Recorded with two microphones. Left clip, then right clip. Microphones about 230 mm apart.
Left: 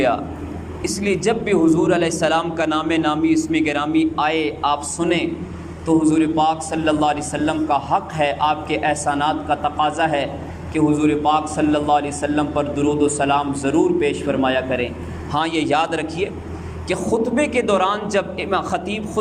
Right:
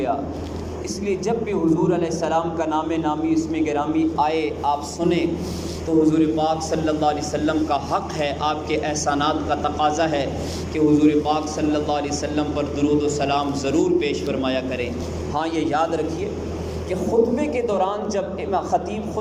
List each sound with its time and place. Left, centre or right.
1.0 s a man's voice: left
17.3 s a man's voice: left